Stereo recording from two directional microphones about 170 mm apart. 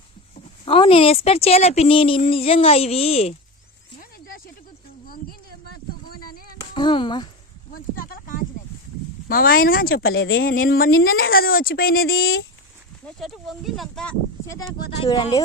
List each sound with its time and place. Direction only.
0.6 s speech: 30° left (ahead or behind)
5.0 s a sound: 60° left (ahead or behind)
6.1 s music: 60° left (ahead or behind)
6.6 s speech: 25° left (ahead or behind)
7.7 s a sound: 55° left (ahead or behind)
9.3 s speech: 60° left (ahead or behind)
13.1 s speech: centre (ahead or behind)